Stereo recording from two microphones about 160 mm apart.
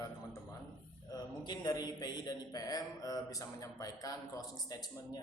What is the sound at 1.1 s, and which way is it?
A man's voice, 25° left (ahead or behind).